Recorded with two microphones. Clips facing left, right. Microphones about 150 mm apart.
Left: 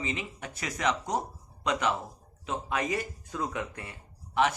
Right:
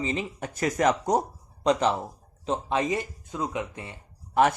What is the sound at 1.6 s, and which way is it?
Speech, 35° right (ahead or behind).